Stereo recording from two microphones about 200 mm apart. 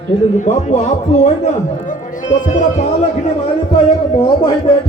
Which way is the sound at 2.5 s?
35° left (ahead or behind).